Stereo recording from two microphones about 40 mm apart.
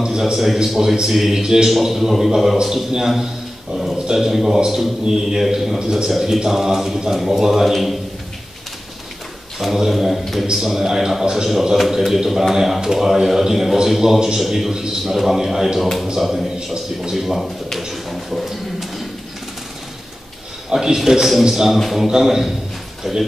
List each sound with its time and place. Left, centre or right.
0.2 s a man's voice: centre
9.6 s a man's voice: centre
14.7 s a man's voice: centre
15.0 s a man's voice: centre
18.3 s a sound: centre
20.7 s a man's voice: centre
22.0 s a man's voice: centre